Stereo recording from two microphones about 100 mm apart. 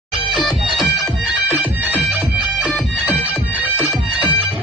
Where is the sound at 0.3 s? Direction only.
Centre (ahead or behind).